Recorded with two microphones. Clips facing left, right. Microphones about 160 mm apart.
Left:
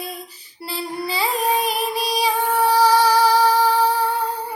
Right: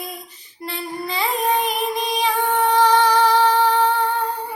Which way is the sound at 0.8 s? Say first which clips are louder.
Left 1 dB; 35° left (ahead or behind).